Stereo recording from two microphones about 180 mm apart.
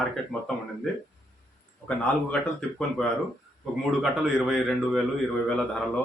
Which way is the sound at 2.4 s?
5° left (ahead or behind).